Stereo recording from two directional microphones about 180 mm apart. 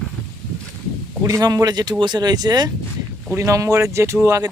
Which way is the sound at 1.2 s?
20° right (ahead or behind).